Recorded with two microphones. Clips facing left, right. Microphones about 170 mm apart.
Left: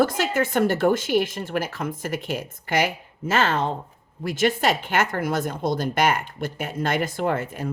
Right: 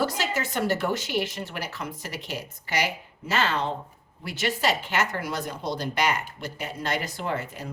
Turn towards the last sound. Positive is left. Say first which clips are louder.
# left 6 dB
turn(degrees=50)  # may be behind; listen again after turning